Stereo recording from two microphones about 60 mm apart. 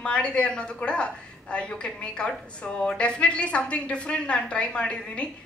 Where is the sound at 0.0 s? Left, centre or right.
Centre.